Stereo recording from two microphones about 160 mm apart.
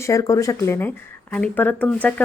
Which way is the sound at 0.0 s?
20° left (ahead or behind).